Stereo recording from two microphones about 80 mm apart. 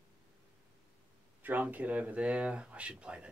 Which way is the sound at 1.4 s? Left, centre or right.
Right.